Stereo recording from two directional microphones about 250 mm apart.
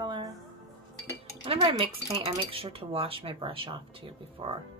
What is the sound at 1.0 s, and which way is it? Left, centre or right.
Chink, right.